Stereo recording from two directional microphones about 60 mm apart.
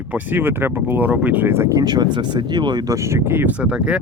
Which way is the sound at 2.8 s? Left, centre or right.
Right.